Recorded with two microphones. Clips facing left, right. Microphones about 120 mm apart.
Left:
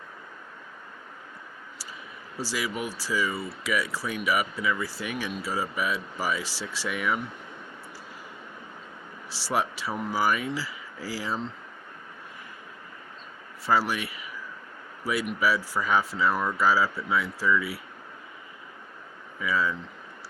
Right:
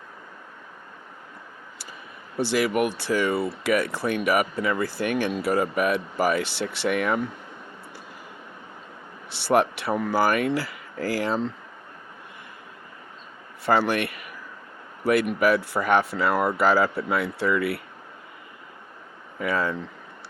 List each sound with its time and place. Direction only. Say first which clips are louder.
2.5 s speech: right 9 dB; 60° right (ahead or behind)
9.3 s speech: right 7 dB; 60° right (ahead or behind)
13.7 s speech: right 4 dB; 60° right (ahead or behind)
19.4 s speech: right 2 dB; 55° right (ahead or behind)